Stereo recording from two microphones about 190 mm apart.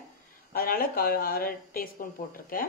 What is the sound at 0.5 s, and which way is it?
Speech, 50° left (ahead or behind).